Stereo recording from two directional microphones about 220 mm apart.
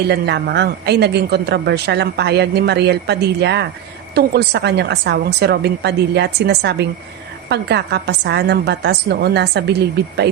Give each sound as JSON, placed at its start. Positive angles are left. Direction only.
{"t": 0.1, "sound": "a woman's voice", "side_deg": -50}